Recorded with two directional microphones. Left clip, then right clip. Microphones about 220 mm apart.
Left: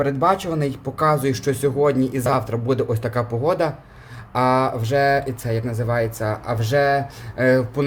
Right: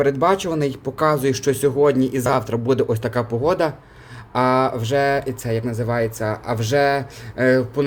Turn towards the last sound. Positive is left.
turn(degrees=0)  # may be behind; listen again after turning